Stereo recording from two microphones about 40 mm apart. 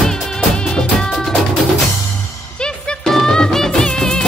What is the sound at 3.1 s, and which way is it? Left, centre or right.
Music, centre.